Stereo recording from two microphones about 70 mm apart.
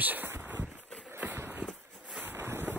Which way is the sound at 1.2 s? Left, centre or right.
Right.